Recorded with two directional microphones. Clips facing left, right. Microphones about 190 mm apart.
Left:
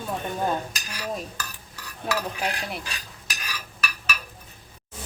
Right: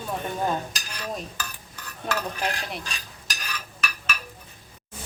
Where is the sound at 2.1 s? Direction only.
5° left (ahead or behind).